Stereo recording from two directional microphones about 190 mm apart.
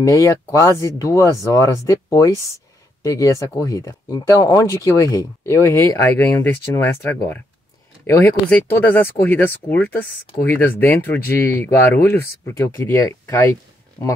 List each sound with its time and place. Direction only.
0.0 s speech: 15° left (ahead or behind)